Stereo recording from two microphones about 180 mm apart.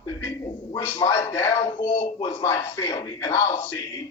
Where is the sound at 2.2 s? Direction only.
15° left (ahead or behind).